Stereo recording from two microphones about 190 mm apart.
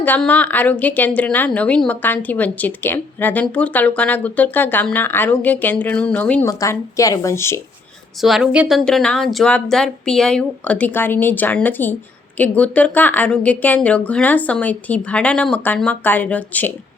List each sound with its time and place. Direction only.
0.0 s a woman's voice: 10° left (ahead or behind)
8.2 s a woman's voice: 5° right (ahead or behind)